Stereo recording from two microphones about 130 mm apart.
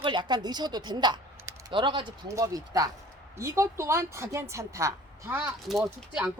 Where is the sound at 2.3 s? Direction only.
25° right (ahead or behind).